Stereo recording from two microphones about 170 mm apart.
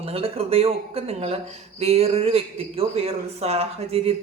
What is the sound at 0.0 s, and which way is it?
Speech, 35° right (ahead or behind).